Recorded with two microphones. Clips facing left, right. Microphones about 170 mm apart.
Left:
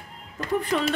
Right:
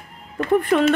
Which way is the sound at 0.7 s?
50° right (ahead or behind).